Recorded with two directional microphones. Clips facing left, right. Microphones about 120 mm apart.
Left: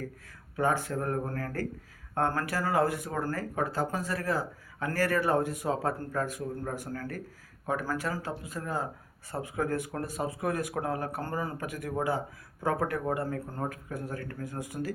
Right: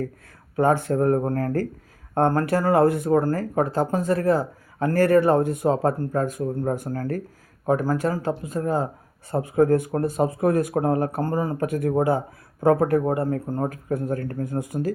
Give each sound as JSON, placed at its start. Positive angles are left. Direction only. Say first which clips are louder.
{"t": 0.5, "sound": "speech", "louder": "right 8 dB", "side_deg": -55}
{"t": 0.9, "sound": "speech", "louder": "right 11 dB", "side_deg": -40}